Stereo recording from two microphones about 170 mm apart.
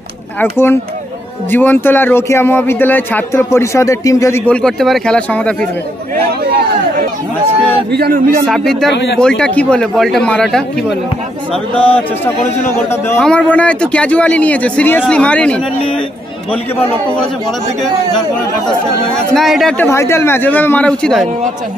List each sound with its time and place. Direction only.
0.4 s speech: 15° left (ahead or behind)
4.5 s speech: 5° left (ahead or behind)
7.9 s speech: 65° right (ahead or behind)
8.5 s speech: centre (ahead or behind)
13.2 s speech: 5° left (ahead or behind)
19.3 s speech: centre (ahead or behind)
19.8 s speech: 15° left (ahead or behind)